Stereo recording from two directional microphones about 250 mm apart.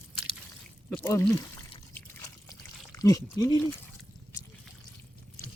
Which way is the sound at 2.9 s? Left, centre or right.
Centre.